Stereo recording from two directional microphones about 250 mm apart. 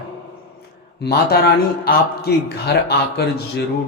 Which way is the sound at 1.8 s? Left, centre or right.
Left.